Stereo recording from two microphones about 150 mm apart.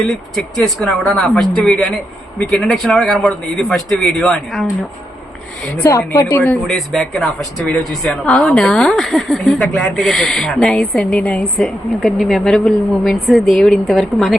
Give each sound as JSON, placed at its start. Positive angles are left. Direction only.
{"t": 0.0, "sound": "a woman's voice", "side_deg": 0}
{"t": 6.1, "sound": "speech", "side_deg": 15}
{"t": 6.7, "sound": "a woman's voice", "side_deg": 5}